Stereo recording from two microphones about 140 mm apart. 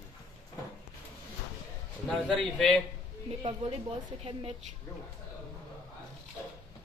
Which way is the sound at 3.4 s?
45° right (ahead or behind).